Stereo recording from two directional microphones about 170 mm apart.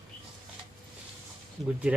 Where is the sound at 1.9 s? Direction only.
5° right (ahead or behind).